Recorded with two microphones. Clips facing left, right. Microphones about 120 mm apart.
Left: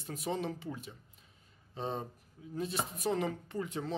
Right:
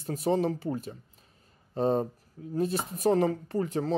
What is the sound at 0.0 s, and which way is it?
Speech, 40° right (ahead or behind).